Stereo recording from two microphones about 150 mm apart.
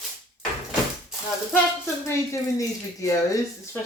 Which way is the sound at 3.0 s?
20° left (ahead or behind).